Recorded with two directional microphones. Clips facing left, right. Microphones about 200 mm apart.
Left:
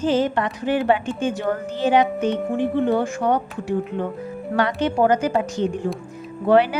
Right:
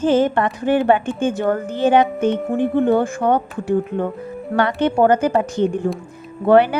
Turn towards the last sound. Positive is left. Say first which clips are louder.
# right 3 dB
turn(degrees=-55)  # may be behind; listen again after turning